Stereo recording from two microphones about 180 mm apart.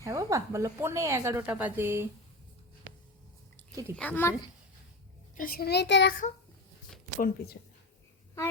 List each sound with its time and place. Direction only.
0.0 s speech: 15° right (ahead or behind)
3.7 s a child's voice: 20° right (ahead or behind)
3.9 s speech: 10° left (ahead or behind)
5.4 s a child's voice: 55° left (ahead or behind); by 6.1 s 70° left (ahead or behind)
7.2 s a child's voice: 60° left (ahead or behind)